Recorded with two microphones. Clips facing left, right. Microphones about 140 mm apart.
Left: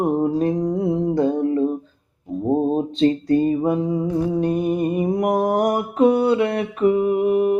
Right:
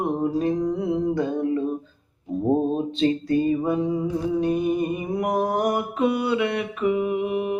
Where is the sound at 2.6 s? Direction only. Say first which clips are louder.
Left 4 dB; 35° left (ahead or behind).